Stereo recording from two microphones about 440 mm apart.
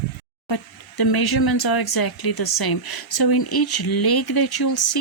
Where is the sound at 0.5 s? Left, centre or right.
Left.